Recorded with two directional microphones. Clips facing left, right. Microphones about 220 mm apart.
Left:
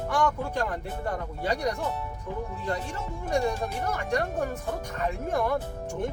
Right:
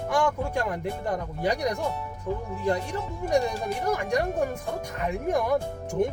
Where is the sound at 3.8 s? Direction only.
15° right (ahead or behind).